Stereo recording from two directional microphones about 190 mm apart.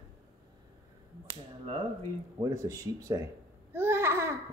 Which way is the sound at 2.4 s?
15° right (ahead or behind).